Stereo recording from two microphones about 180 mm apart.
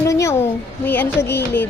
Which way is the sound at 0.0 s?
15° left (ahead or behind).